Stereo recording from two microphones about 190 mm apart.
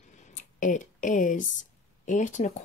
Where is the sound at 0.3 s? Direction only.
40° left (ahead or behind).